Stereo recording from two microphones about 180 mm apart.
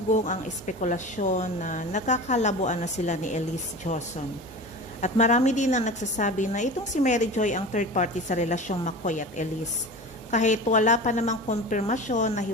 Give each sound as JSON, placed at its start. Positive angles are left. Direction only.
{"t": 0.1, "sound": "a woman's voice", "side_deg": 45}